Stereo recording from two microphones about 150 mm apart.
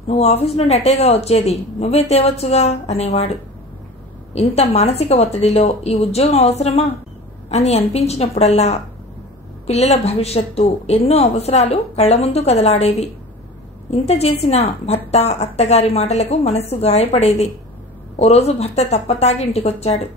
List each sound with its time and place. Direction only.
0.0 s a woman's voice: 45° left (ahead or behind)
4.3 s a woman's voice: 45° left (ahead or behind)